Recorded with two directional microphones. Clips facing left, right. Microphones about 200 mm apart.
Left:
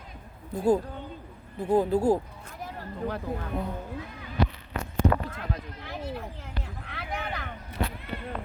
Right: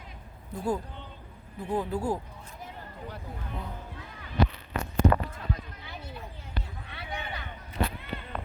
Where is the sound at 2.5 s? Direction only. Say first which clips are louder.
Left 5 dB; 75° left (ahead or behind).